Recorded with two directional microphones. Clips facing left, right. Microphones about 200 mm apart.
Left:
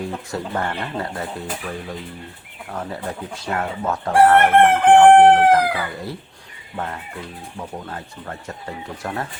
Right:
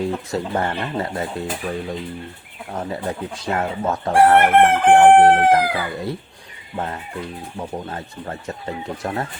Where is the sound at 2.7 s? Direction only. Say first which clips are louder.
Right 3 dB; 20° right (ahead or behind).